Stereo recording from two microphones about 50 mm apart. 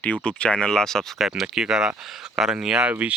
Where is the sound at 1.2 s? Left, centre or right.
Centre.